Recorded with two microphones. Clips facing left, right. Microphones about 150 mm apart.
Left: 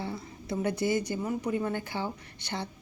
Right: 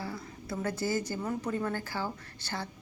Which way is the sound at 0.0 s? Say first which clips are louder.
Left 2 dB; 25° left (ahead or behind).